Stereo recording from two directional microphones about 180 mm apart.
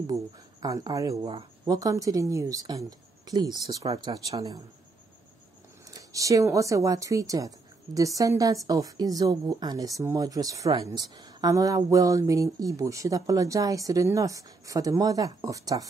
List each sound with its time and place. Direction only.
0.0 s speech: 20° right (ahead or behind)
5.9 s speech: 20° right (ahead or behind)